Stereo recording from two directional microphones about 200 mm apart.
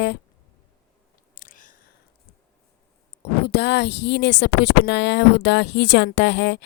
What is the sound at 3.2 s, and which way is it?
Speech, 55° left (ahead or behind).